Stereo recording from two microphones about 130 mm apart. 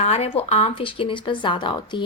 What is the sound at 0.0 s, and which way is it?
Speech, 50° left (ahead or behind).